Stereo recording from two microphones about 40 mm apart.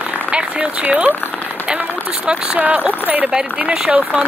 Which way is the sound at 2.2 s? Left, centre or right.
Right.